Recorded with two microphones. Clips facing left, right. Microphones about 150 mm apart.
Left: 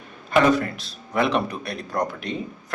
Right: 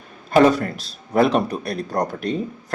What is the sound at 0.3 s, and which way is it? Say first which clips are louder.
Speech: right 3 dB; 35° right (ahead or behind).